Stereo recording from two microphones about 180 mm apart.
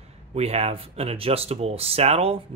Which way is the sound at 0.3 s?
35° right (ahead or behind).